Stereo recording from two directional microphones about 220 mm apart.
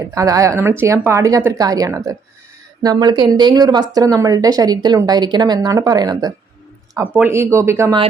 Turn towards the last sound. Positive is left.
turn(degrees=-15)  # may be behind; listen again after turning